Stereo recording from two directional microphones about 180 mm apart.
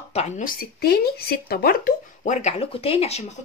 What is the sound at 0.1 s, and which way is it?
Speech, 45° left (ahead or behind).